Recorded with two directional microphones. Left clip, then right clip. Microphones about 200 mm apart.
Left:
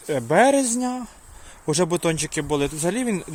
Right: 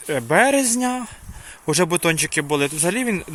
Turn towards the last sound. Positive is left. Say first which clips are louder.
# right 3 dB
turn(degrees=0)  # may be behind; listen again after turning